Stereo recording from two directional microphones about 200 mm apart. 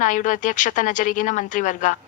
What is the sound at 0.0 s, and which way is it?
A woman's voice, 40° left (ahead or behind).